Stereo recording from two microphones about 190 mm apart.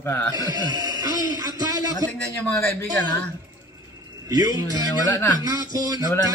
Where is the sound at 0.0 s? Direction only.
15° left (ahead or behind).